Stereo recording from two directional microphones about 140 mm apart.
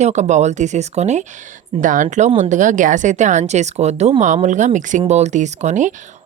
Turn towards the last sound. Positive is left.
turn(degrees=-60)  # may be behind; listen again after turning